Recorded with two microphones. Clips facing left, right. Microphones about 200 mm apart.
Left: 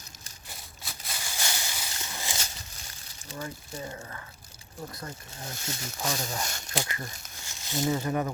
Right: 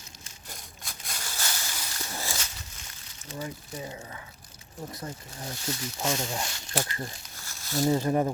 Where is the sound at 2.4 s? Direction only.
35° left (ahead or behind).